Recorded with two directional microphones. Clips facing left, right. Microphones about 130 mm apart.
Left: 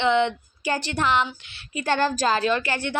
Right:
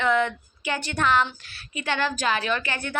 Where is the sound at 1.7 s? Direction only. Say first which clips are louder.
Left 4 dB; 40° left (ahead or behind).